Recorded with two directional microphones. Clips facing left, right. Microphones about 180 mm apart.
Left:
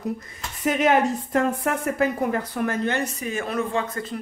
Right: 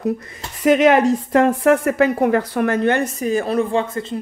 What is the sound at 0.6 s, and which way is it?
A woman's voice, 90° right.